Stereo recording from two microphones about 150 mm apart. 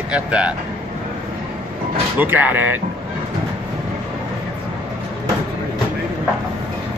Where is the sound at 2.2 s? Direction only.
10° right (ahead or behind).